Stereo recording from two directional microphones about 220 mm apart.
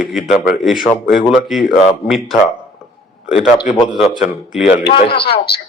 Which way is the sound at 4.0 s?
5° right (ahead or behind).